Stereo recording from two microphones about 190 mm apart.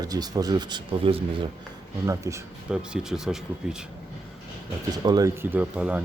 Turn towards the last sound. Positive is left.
turn(degrees=-5)  # may be behind; listen again after turning